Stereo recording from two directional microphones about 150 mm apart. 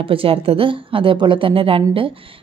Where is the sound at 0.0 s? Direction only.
35° right (ahead or behind).